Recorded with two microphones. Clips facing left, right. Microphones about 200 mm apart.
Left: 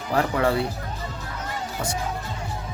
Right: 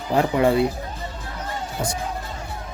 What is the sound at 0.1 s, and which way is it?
Speech, 20° right (ahead or behind).